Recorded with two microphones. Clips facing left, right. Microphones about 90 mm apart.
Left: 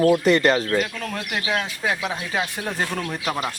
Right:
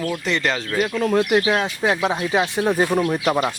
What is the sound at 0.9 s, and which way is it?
Speech, 30° right (ahead or behind).